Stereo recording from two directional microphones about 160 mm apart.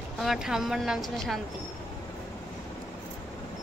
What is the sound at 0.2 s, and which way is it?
A woman's voice, centre (ahead or behind).